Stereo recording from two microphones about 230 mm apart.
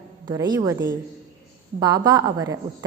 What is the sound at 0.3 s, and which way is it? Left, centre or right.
A woman's voice, centre.